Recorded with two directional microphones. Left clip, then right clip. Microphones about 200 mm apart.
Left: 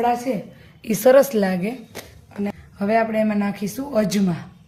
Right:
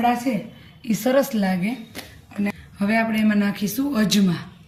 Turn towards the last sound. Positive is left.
turn(degrees=50)  # may be behind; listen again after turning